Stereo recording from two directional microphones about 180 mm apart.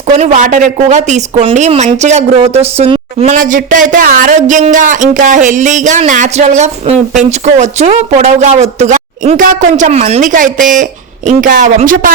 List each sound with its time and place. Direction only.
0.1 s speech: 40° right (ahead or behind)